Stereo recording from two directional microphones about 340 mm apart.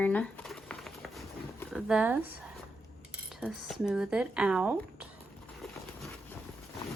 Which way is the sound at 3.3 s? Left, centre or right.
Centre.